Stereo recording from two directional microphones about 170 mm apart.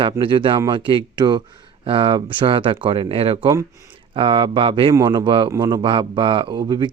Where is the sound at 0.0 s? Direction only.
30° right (ahead or behind).